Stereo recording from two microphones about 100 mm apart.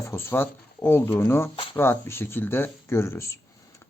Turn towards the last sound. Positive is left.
turn(degrees=30)  # may be behind; listen again after turning